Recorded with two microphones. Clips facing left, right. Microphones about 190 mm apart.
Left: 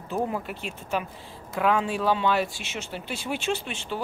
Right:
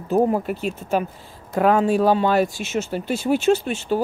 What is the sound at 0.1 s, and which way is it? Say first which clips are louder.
Speech: right 10 dB; 45° right (ahead or behind).